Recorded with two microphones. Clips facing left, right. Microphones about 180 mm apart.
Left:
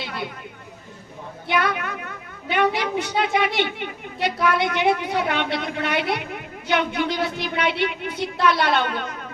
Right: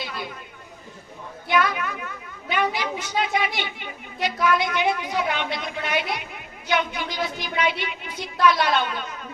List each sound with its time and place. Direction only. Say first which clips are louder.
0.0 s chatter: left 2 dB; 65° left (ahead or behind)
1.5 s a sound: right 1 dB; 60° left (ahead or behind)
2.5 s a woman's voice: left 4 dB; 60° left (ahead or behind)